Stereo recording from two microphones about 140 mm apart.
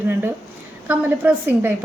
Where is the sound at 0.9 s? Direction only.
10° right (ahead or behind).